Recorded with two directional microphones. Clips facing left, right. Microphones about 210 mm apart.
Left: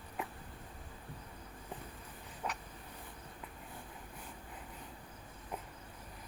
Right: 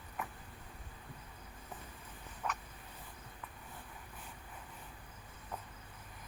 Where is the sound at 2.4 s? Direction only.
20° left (ahead or behind).